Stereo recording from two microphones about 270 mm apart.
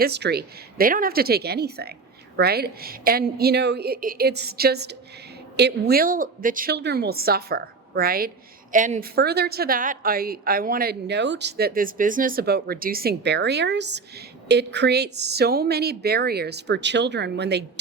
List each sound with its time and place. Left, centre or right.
0.0 s a woman's voice: right